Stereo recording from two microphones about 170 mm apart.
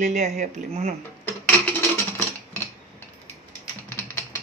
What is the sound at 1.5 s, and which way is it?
Music, 10° left (ahead or behind).